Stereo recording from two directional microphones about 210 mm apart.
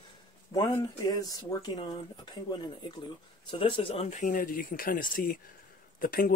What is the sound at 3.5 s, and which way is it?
Speech, 25° left (ahead or behind).